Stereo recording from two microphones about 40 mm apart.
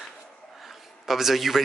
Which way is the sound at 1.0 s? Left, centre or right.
Centre.